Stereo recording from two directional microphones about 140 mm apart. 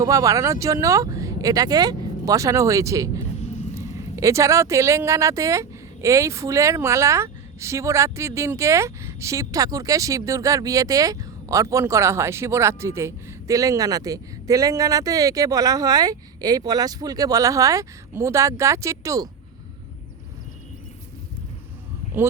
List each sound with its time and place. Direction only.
0.0 s speech: 25° right (ahead or behind)